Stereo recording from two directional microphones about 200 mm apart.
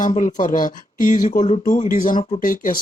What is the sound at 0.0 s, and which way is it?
Speech, 40° left (ahead or behind).